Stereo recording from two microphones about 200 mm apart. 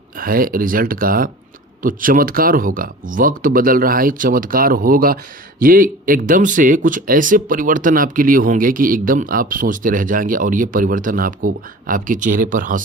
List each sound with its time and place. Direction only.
0.2 s speech: 45° right (ahead or behind)